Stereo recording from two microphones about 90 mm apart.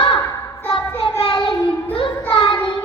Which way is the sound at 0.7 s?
75° left (ahead or behind).